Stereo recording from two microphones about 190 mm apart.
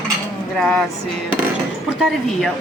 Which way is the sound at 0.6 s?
Centre (ahead or behind).